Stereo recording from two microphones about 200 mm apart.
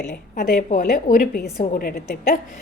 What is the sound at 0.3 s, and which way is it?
A woman's voice, 50° left (ahead or behind).